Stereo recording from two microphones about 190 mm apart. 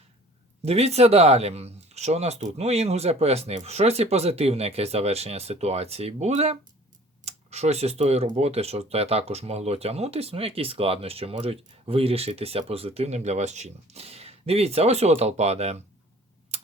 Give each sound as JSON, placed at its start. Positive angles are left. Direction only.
{"t": 0.6, "sound": "speech", "side_deg": -35}